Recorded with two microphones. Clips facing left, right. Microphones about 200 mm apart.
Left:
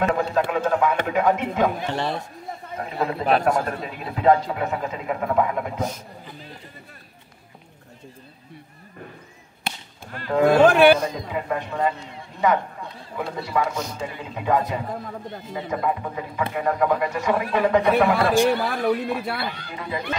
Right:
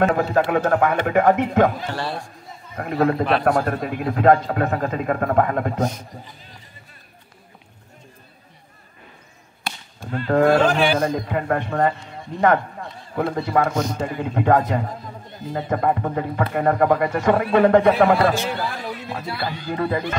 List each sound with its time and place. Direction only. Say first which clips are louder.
0.0 s a man's voice: right 3 dB; 60° right (ahead or behind)
2.0 s speech: left 1 dB; 20° left (ahead or behind)
2.8 s a man's voice: right 6 dB; 60° right (ahead or behind)
10.2 s a man's voice: right 2 dB; 60° right (ahead or behind)
10.6 s speech: left 5 dB; 60° left (ahead or behind)
11.0 s a man's voice: right 5 dB; 55° right (ahead or behind)
13.2 s a man's voice: right 5 dB; 50° right (ahead or behind)
18.5 s speech: left 6 dB; 60° left (ahead or behind)
19.7 s a man's voice: right 8 dB; 55° right (ahead or behind)